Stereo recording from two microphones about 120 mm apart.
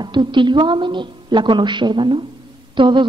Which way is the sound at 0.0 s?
40° right (ahead or behind).